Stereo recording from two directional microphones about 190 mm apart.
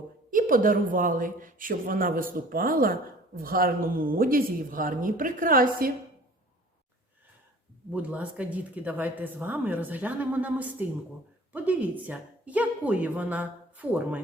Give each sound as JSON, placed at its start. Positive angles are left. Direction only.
{"t": 0.3, "sound": "speech", "side_deg": -45}
{"t": 7.9, "sound": "speech", "side_deg": -5}